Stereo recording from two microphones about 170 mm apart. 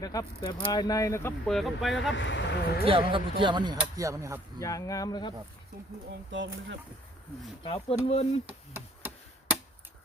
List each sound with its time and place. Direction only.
0.0 s speech: 20° left (ahead or behind)
1.5 s speech: centre (ahead or behind)
2.0 s speech: 90° left
2.8 s speech: 30° right (ahead or behind)
4.6 s speech: 20° left (ahead or behind)
6.3 s speech: 90° right
7.6 s speech: 35° left (ahead or behind)
8.4 s knock: 10° right (ahead or behind)